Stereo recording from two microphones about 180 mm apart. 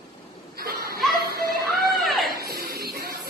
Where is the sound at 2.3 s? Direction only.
60° right (ahead or behind).